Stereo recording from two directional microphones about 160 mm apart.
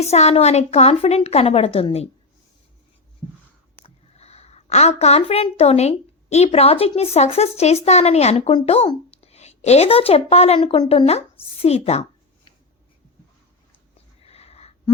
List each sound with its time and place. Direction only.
0.0 s a woman's voice: 40° left (ahead or behind)
3.8 s a woman's voice: 40° left (ahead or behind)
14.2 s sniff: 40° left (ahead or behind)